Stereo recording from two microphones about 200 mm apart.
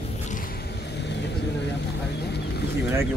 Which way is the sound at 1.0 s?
60° left (ahead or behind).